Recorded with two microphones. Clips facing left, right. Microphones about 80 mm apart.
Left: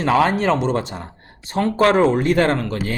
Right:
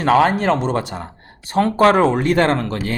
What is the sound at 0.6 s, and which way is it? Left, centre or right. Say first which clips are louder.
Speech: even; right.